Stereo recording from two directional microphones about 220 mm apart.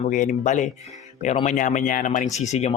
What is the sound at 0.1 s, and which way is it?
Speech, 35° left (ahead or behind).